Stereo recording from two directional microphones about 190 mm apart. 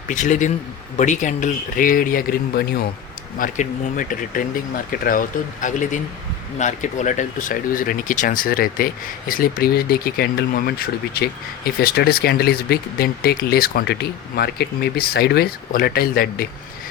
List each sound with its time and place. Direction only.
0.1 s speech: 40° left (ahead or behind)